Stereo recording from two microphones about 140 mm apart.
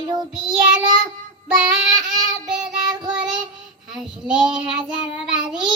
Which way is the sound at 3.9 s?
5° right (ahead or behind).